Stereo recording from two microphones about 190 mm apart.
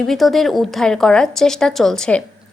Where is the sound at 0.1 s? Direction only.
Centre (ahead or behind).